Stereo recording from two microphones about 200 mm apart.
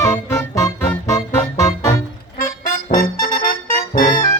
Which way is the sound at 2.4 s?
45° left (ahead or behind).